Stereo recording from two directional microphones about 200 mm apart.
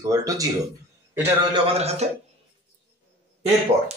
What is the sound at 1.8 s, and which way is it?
Speech, 30° right (ahead or behind).